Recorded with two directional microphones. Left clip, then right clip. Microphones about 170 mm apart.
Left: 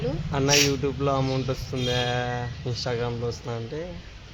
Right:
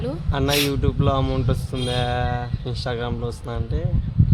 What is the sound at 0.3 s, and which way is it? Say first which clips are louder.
A man's voice: even; centre (ahead or behind).